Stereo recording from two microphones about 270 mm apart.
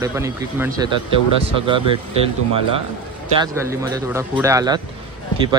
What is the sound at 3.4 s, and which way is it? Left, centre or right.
Speech, centre.